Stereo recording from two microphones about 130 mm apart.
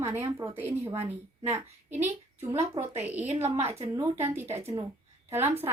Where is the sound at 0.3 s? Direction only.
20° right (ahead or behind).